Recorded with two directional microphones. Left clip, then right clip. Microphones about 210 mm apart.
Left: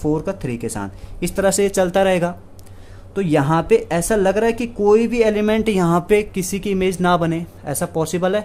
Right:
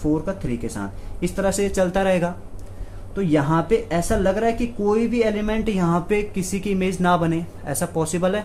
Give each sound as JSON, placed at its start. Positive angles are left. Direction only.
{"t": 0.0, "sound": "speech", "side_deg": 50}